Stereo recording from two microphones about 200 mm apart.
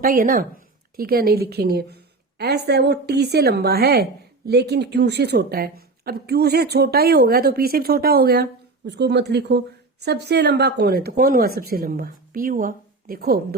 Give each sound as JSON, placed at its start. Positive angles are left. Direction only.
{"t": 0.0, "sound": "a woman's voice", "side_deg": -45}